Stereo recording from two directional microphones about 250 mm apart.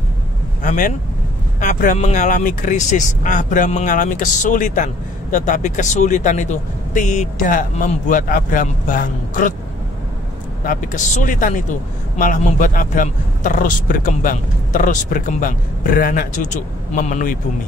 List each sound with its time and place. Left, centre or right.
0.6 s speech: left
10.6 s speech: left